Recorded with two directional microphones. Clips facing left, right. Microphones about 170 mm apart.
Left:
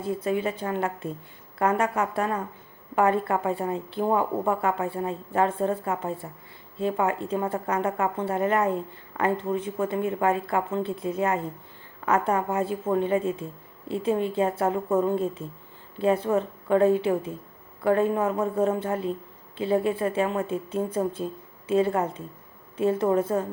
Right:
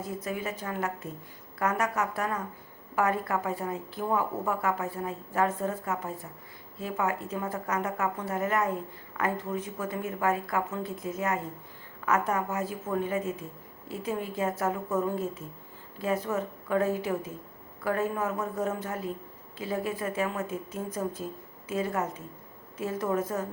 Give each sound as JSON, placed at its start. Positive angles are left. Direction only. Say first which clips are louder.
{"t": 0.0, "sound": "a woman's voice", "louder": "left 7 dB", "side_deg": 30}